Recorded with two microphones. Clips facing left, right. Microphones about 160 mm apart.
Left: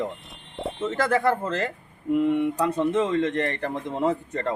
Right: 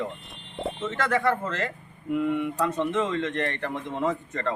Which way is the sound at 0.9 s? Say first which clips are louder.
Left 3 dB; 35° left (ahead or behind).